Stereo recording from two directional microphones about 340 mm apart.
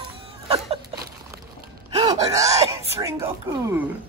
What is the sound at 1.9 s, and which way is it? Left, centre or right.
Speech, centre.